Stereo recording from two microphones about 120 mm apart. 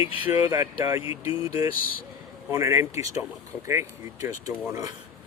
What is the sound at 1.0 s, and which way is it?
Speech, 50° left (ahead or behind).